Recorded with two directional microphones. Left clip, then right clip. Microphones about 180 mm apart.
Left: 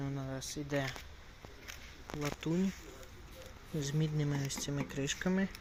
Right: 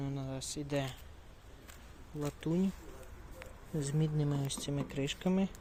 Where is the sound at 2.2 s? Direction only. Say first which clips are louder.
Even; 5° right (ahead or behind).